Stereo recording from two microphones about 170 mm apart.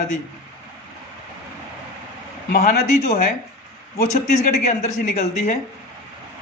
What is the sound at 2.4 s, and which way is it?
Speech, 55° left (ahead or behind).